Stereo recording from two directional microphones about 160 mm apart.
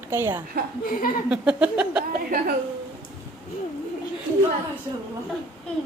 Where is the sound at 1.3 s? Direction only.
10° right (ahead or behind).